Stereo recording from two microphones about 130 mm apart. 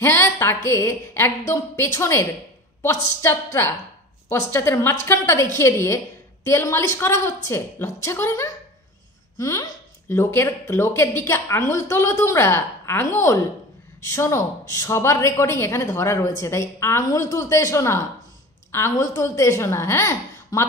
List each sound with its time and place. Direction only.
0.0 s a woman's voice: 20° left (ahead or behind)
4.3 s a woman's voice: 20° left (ahead or behind)